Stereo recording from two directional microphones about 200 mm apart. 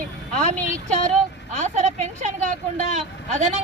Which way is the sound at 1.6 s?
35° right (ahead or behind).